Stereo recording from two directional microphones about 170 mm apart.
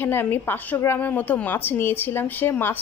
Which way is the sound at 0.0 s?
10° left (ahead or behind).